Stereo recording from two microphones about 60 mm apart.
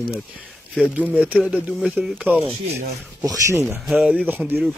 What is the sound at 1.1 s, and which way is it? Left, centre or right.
Speech, centre.